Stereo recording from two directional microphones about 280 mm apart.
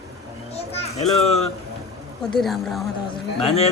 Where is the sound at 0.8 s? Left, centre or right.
Left.